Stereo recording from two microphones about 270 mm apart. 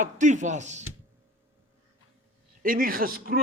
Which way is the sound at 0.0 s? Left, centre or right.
Right.